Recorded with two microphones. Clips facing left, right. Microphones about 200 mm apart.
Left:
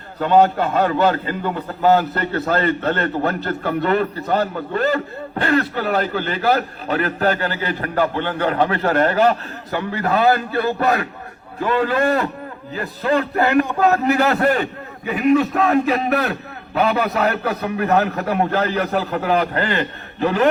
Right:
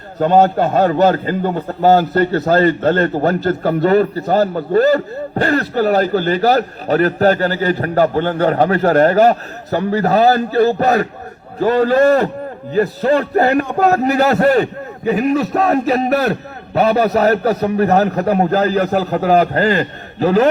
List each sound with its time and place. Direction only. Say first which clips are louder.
0.2 s a man's voice: right 3 dB; 45° right (ahead or behind)